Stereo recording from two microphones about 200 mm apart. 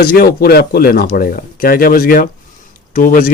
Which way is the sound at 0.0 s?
45° left (ahead or behind).